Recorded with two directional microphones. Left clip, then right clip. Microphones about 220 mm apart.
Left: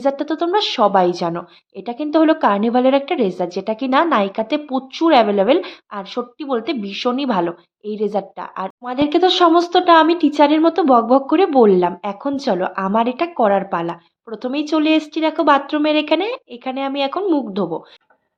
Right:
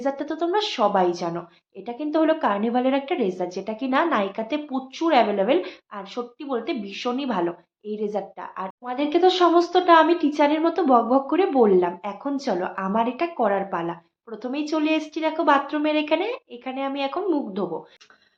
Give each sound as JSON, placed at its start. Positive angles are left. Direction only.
{"t": 0.0, "sound": "a woman's voice", "side_deg": 40}